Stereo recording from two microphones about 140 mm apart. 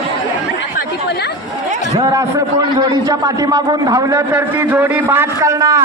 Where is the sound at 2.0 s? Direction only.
30° right (ahead or behind).